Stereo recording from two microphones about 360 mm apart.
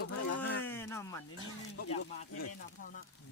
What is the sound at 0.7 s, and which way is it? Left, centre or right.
Speech, centre.